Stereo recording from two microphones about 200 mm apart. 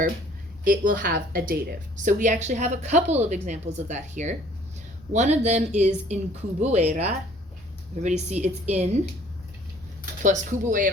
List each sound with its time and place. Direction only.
0.6 s a woman's voice: 45° right (ahead or behind)
10.2 s a woman's voice: 40° right (ahead or behind)